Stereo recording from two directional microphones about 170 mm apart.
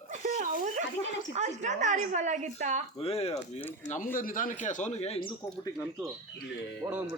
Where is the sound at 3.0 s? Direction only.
35° left (ahead or behind).